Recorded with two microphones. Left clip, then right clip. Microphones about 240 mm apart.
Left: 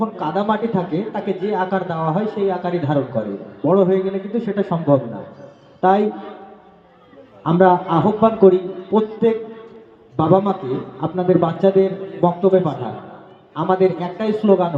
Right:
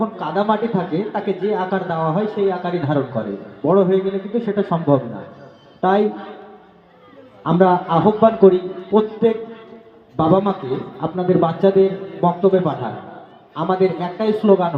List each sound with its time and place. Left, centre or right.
0.0 s speech: left
7.4 s speech: left